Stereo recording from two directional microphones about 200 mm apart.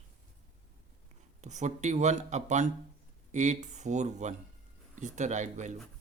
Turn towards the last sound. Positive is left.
turn(degrees=-35)  # may be behind; listen again after turning